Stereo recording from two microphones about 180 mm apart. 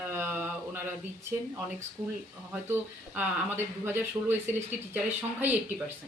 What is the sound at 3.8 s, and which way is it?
Speech, 10° right (ahead or behind).